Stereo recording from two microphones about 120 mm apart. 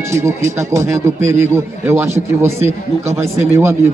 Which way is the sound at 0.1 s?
25° right (ahead or behind).